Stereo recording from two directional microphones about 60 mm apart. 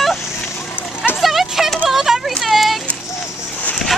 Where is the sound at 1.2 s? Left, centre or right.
Centre.